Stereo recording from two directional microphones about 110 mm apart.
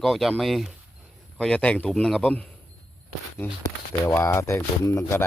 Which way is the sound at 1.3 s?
10° left (ahead or behind).